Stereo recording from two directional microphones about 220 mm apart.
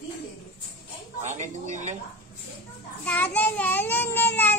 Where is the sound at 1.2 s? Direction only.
35° right (ahead or behind).